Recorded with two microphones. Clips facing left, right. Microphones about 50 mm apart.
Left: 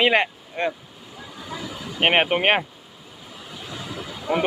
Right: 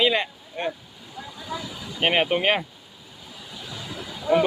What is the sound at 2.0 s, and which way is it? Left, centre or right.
Speech, left.